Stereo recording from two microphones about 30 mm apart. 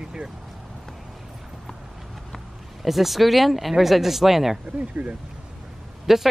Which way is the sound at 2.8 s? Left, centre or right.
Centre.